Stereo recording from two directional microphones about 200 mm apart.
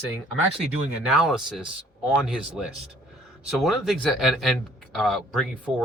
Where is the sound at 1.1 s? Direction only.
Centre (ahead or behind).